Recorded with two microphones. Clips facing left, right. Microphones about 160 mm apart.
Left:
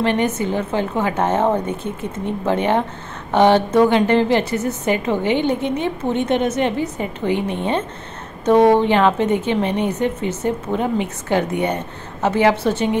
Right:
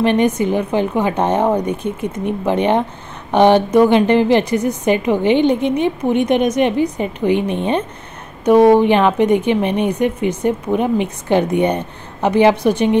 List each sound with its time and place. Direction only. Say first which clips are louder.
0.0 s a woman's voice: right 4 dB; 15° right (ahead or behind)